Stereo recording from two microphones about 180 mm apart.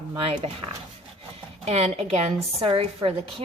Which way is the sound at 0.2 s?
30° right (ahead or behind).